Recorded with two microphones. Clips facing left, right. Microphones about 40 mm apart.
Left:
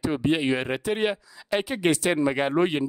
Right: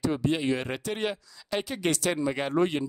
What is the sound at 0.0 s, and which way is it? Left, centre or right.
Speech, left.